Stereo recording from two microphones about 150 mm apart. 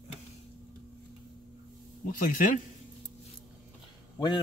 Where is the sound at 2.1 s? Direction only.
65° left (ahead or behind).